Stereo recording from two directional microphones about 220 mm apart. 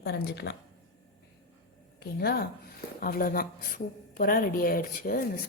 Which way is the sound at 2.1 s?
45° left (ahead or behind).